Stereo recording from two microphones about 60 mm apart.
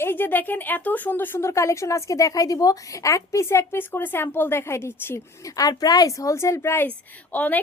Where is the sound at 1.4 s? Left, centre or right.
Left.